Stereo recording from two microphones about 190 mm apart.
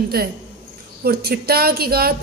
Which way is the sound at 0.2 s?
55° right (ahead or behind).